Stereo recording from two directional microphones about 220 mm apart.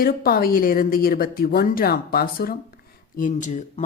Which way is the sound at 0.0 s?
40° left (ahead or behind).